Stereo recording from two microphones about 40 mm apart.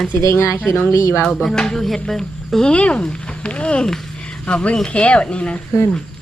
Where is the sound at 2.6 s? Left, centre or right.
Left.